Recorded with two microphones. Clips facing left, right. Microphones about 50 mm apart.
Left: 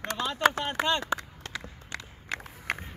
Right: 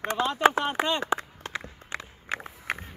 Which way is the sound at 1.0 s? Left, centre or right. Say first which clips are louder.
Right 3 dB; right.